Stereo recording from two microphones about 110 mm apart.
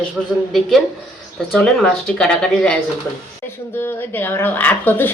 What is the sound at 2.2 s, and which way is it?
Speech, 5° left (ahead or behind).